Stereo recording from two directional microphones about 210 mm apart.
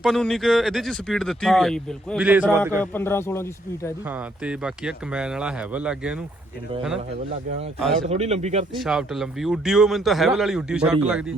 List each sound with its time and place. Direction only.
0.0 s speech: centre (ahead or behind)
2.8 s speech: 10° left (ahead or behind)
4.1 s speech: 5° right (ahead or behind)
8.1 s speech: 30° right (ahead or behind)
8.7 s speech: centre (ahead or behind)